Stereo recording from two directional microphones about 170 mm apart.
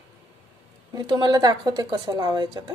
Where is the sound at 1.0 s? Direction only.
25° right (ahead or behind).